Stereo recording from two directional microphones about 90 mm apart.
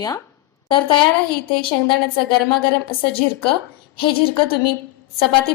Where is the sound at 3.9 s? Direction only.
75° left (ahead or behind).